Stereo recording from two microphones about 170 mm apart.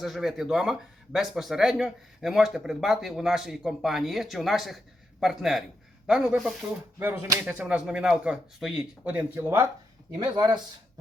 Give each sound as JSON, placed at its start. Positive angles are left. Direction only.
{"t": 0.0, "sound": "speech", "side_deg": 0}
{"t": 7.0, "sound": "speech", "side_deg": -15}
{"t": 10.2, "sound": "speech", "side_deg": -25}